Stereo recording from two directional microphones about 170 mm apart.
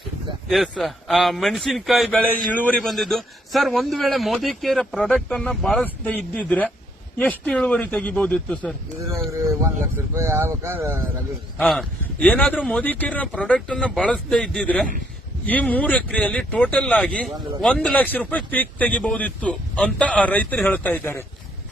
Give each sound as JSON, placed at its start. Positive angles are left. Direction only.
{"t": 0.4, "sound": "a man's voice", "side_deg": 0}
{"t": 10.2, "sound": "speech", "side_deg": -15}
{"t": 11.6, "sound": "speech", "side_deg": 5}